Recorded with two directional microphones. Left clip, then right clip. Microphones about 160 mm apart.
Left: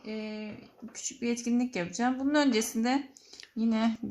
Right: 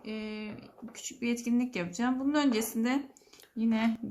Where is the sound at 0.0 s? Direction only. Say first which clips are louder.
Left 1 dB; 25° left (ahead or behind).